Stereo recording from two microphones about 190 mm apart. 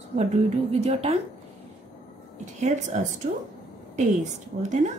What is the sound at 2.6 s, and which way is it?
Speech, 40° right (ahead or behind).